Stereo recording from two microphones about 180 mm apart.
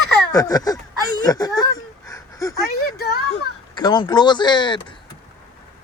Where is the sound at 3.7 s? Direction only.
25° left (ahead or behind).